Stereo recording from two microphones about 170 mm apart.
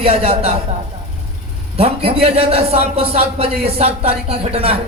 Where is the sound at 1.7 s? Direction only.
35° right (ahead or behind).